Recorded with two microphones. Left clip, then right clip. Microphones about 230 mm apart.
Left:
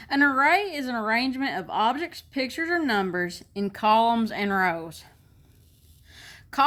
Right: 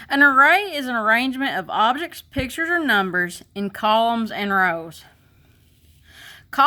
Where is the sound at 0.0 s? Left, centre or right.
Right.